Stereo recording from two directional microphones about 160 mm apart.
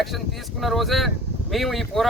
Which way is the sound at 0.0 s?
Centre (ahead or behind).